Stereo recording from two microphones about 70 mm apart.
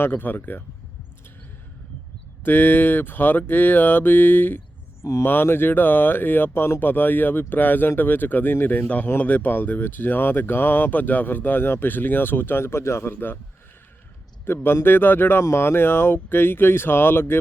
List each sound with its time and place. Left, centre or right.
0.0 s speech: left
2.4 s speech: left
14.4 s speech: left